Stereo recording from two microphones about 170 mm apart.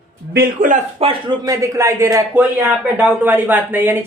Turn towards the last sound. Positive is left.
turn(degrees=-10)  # may be behind; listen again after turning